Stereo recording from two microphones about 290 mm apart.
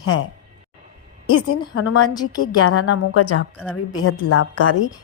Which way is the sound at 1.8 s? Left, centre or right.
Left.